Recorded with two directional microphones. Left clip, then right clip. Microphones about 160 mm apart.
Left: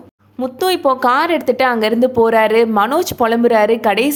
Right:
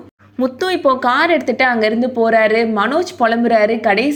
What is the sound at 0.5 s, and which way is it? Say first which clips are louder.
Speech: left 1 dB; 15° left (ahead or behind).